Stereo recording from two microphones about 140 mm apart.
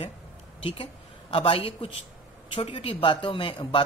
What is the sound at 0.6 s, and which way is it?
Speech, 40° left (ahead or behind).